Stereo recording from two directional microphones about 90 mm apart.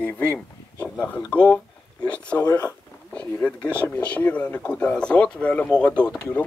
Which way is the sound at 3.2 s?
15° left (ahead or behind).